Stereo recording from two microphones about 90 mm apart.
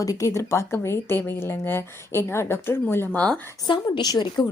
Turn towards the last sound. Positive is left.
turn(degrees=50)  # may be behind; listen again after turning